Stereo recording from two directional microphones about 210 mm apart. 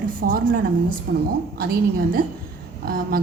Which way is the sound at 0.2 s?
40° right (ahead or behind).